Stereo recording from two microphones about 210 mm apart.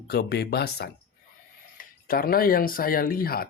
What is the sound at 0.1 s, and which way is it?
Speech, 50° left (ahead or behind).